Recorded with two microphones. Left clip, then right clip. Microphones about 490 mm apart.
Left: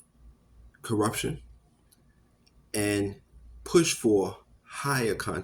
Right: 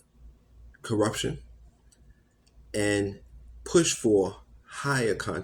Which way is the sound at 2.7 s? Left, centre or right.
Left.